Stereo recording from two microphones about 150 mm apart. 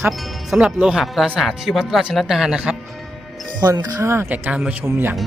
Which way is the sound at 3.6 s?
25° right (ahead or behind).